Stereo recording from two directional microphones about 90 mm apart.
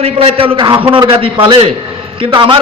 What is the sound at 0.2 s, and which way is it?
A man's voice, 85° right.